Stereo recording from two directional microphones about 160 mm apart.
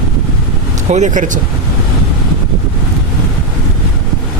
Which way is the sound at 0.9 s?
50° right (ahead or behind).